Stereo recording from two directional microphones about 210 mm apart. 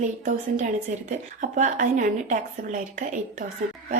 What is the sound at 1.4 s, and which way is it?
A woman's voice, 35° right (ahead or behind).